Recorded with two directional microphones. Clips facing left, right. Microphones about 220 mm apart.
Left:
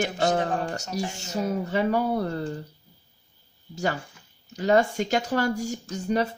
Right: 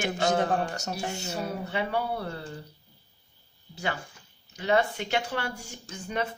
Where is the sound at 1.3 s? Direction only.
45° left (ahead or behind).